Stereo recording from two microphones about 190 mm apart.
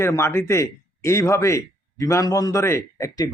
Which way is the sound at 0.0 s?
15° left (ahead or behind).